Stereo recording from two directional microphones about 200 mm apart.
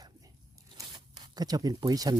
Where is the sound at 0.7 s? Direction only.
20° right (ahead or behind).